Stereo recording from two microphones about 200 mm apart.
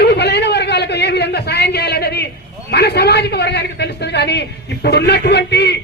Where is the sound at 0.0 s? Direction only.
55° left (ahead or behind).